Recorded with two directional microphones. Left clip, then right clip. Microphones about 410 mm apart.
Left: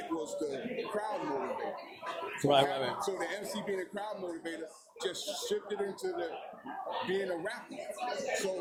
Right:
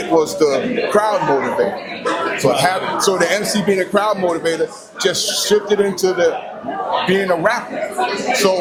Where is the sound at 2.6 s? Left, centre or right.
Right.